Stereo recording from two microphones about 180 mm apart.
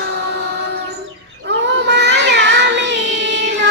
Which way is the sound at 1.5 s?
80° right.